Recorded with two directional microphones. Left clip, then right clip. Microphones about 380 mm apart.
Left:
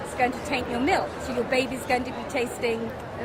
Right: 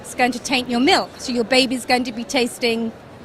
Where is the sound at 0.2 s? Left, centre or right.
Right.